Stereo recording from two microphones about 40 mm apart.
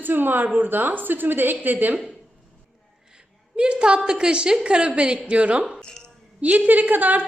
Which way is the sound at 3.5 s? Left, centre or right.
Right.